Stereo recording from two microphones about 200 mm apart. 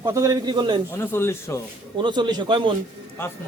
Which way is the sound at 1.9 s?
25° right (ahead or behind).